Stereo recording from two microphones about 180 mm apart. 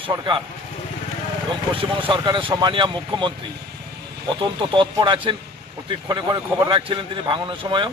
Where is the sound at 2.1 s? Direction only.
25° right (ahead or behind).